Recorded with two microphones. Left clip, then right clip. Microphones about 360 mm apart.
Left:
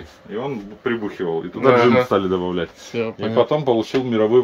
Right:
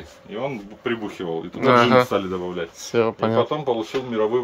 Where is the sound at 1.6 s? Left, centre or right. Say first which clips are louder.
Left 1 dB; centre.